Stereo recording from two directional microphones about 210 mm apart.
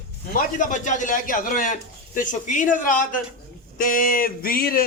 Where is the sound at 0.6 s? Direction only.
35° left (ahead or behind).